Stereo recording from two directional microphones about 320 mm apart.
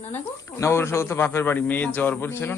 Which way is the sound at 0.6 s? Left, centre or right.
Centre.